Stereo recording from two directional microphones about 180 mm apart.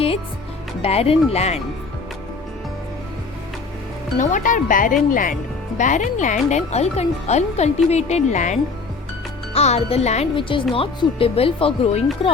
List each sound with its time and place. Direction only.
0.8 s speech: 35° left (ahead or behind)
4.2 s speech: 45° left (ahead or behind)
9.6 s speech: 35° left (ahead or behind)